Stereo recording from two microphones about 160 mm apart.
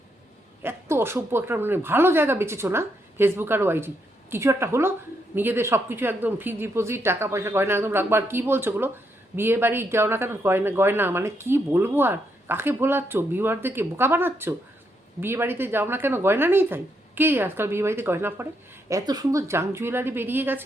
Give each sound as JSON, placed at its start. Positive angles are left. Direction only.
{"t": 0.6, "sound": "speech", "side_deg": -15}